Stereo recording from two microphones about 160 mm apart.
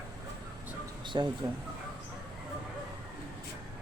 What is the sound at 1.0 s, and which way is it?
Speech, 30° right (ahead or behind).